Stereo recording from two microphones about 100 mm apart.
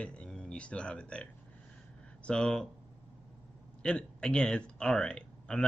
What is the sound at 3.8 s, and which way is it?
Speech, 10° left (ahead or behind).